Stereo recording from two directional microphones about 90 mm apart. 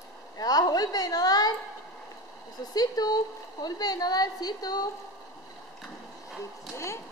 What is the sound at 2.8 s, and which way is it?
A woman's voice, 45° left (ahead or behind).